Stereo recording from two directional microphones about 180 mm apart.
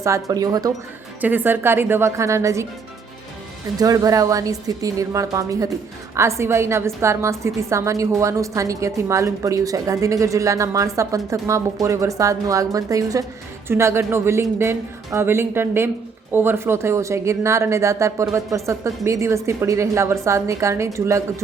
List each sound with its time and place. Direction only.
0.0 s a woman's voice: 20° right (ahead or behind)
3.8 s a woman's voice: 20° right (ahead or behind)